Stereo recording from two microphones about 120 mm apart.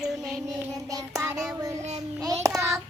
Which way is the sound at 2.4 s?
25° right (ahead or behind).